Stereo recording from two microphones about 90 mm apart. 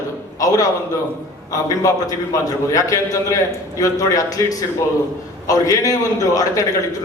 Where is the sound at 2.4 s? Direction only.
40° left (ahead or behind).